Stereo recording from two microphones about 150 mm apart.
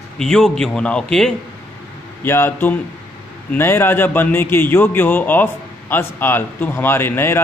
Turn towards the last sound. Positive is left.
turn(degrees=15)  # may be behind; listen again after turning